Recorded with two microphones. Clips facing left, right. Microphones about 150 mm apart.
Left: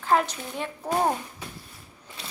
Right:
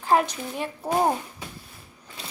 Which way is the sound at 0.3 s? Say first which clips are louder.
Right 2 dB; 10° right (ahead or behind).